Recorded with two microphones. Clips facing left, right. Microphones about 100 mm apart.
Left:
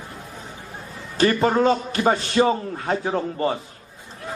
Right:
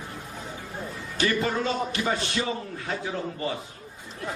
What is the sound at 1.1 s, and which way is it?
A man's voice, 45° left (ahead or behind).